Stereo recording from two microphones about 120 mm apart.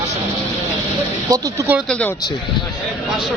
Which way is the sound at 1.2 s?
30° right (ahead or behind).